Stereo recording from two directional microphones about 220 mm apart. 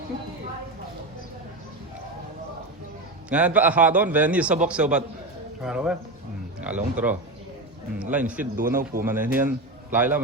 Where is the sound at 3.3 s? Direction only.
5° right (ahead or behind).